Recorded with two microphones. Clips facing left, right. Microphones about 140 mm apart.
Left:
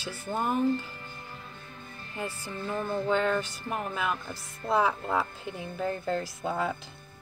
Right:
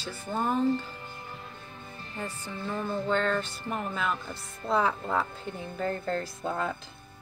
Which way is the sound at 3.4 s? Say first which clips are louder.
Even; 25° right (ahead or behind).